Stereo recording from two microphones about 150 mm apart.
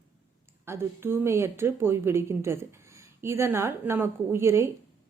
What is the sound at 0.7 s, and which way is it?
A woman's voice, 15° right (ahead or behind).